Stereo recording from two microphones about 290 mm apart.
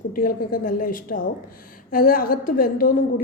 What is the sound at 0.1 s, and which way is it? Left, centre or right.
A woman's voice, left.